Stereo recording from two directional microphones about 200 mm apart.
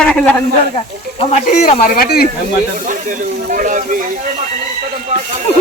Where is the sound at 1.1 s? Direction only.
40° left (ahead or behind).